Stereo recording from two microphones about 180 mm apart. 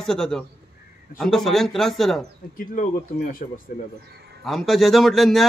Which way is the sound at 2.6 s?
50° left (ahead or behind).